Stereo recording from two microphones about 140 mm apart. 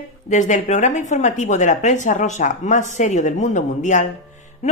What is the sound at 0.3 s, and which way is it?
Speech, 60° left (ahead or behind).